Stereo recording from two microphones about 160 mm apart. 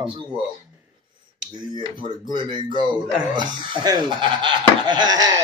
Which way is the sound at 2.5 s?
30° right (ahead or behind).